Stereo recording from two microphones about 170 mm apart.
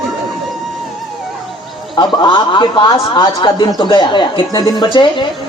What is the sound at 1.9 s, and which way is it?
A man's voice, 30° left (ahead or behind).